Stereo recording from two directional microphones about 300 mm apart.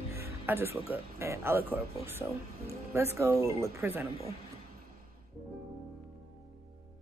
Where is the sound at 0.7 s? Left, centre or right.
Centre.